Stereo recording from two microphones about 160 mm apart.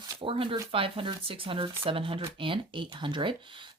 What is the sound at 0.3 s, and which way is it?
Speech, 35° right (ahead or behind).